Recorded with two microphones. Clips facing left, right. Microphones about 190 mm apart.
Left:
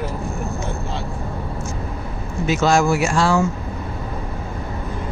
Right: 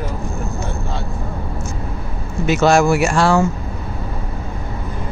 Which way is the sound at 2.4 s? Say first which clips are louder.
Right 3 dB; 65° right (ahead or behind).